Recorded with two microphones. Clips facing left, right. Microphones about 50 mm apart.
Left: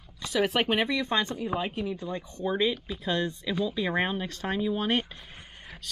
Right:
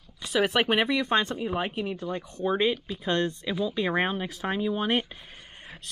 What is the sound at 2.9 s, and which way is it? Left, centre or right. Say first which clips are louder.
Speech: right 2 dB; centre.